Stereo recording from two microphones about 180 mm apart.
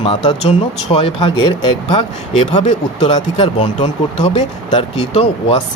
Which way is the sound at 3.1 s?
30° left (ahead or behind).